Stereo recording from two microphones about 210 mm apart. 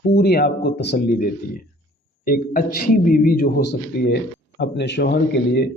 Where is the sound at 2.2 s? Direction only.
40° left (ahead or behind).